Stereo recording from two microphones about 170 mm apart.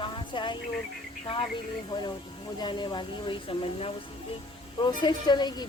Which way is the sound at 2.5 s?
25° left (ahead or behind).